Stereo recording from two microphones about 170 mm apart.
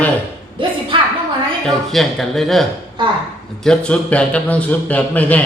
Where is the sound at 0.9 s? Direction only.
30° right (ahead or behind).